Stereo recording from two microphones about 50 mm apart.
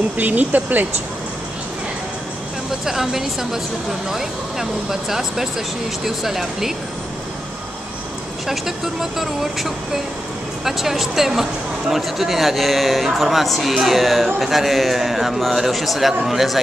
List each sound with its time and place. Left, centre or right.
0.2 s speech: right
2.8 s a man's voice: centre
8.5 s a man's voice: centre